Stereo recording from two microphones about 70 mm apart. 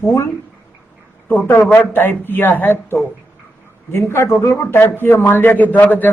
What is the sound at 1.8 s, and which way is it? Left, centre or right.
A man's voice, left.